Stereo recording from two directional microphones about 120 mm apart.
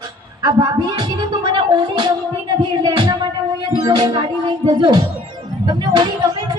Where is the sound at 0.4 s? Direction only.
30° right (ahead or behind).